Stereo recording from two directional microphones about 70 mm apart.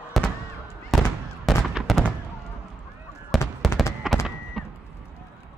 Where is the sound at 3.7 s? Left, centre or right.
Left.